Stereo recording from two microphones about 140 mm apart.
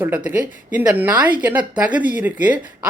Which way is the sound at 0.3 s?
10° right (ahead or behind).